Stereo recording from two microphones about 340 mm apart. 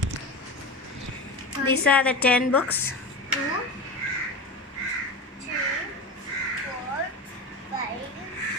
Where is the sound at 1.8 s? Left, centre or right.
Centre.